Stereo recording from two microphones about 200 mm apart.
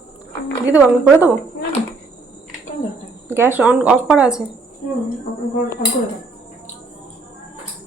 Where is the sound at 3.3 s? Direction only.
10° right (ahead or behind).